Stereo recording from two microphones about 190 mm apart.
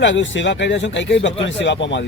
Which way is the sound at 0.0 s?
75° left (ahead or behind).